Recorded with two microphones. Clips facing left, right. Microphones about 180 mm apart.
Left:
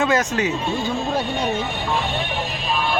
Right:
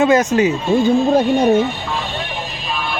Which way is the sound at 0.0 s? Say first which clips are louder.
Right 7 dB; 20° right (ahead or behind).